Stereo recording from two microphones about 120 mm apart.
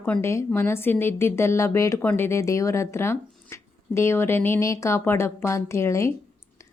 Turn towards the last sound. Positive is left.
turn(degrees=25)  # may be behind; listen again after turning